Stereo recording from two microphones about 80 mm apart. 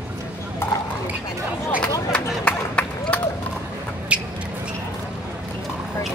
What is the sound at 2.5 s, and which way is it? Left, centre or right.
Run, centre.